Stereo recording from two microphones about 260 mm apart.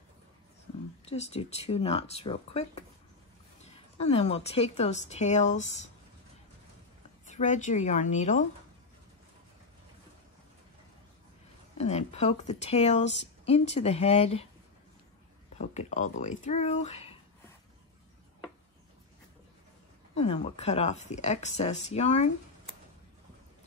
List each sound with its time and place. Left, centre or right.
1.1 s a woman's voice: left
7.2 s a woman's voice: left
11.8 s a woman's voice: left
15.5 s a woman's voice: left
20.2 s a woman's voice: left